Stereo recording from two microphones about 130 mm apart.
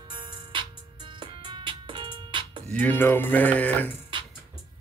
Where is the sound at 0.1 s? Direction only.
40° right (ahead or behind).